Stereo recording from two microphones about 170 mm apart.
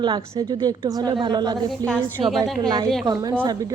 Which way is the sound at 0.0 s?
25° right (ahead or behind).